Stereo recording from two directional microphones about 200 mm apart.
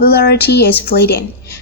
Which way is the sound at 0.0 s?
50° left (ahead or behind).